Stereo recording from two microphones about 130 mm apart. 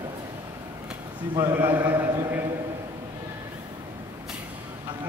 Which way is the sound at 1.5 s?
15° right (ahead or behind).